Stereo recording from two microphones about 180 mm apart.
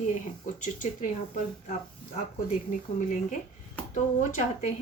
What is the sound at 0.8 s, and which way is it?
Speech, 45° left (ahead or behind).